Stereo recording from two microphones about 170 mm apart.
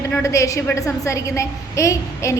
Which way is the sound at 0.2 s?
20° left (ahead or behind).